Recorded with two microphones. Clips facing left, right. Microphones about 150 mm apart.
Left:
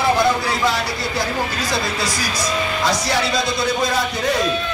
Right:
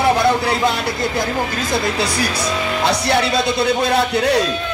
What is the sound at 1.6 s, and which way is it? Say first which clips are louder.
A man's voice: right 3 dB; 55° right (ahead or behind).